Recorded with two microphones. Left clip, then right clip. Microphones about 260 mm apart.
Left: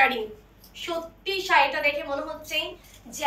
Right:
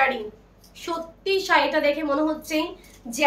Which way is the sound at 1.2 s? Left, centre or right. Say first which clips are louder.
Right 1 dB; right.